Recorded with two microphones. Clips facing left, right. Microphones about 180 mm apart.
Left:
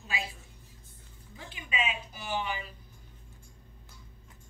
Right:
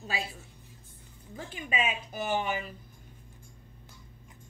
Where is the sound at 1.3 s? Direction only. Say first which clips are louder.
Right 4 dB; 45° right (ahead or behind).